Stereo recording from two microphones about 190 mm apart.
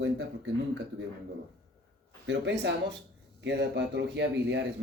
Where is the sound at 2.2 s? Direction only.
70° right (ahead or behind).